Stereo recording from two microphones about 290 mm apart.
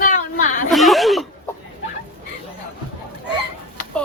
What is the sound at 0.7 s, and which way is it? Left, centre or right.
Air horn, centre.